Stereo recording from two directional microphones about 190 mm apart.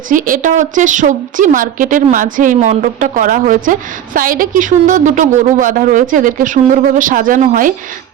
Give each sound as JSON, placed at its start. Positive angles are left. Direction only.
{"t": 0.1, "sound": "a woman's voice", "side_deg": -45}